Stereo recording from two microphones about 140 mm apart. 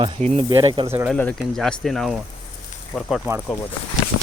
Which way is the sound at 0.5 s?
30° right (ahead or behind).